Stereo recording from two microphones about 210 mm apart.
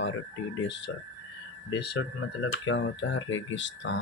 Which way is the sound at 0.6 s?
55° left (ahead or behind).